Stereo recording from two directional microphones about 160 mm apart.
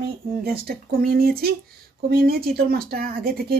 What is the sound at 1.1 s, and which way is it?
Speech, 70° right (ahead or behind).